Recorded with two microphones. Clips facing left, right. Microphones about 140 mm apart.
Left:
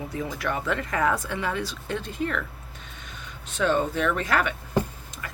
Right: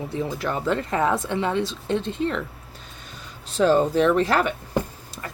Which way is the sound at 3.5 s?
35° right (ahead or behind).